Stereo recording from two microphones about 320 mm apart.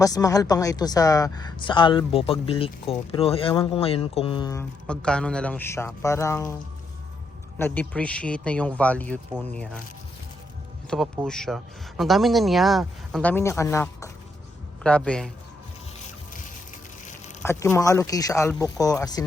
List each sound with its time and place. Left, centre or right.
0.0 s speech: centre
7.6 s speech: centre
10.8 s speech: centre
16.0 s music: left
17.4 s speech: centre